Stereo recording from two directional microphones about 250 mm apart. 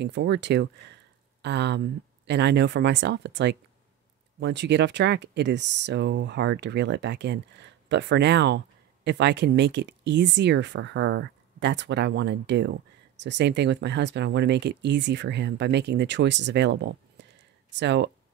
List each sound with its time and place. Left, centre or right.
0.0 s speech: right